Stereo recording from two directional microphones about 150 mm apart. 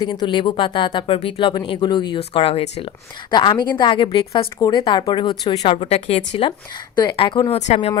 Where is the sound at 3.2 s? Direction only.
30° left (ahead or behind).